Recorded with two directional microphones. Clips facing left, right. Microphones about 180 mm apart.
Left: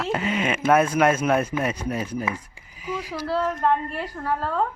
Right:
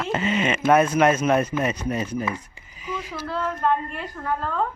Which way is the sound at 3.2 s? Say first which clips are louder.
Left 2 dB; 35° left (ahead or behind).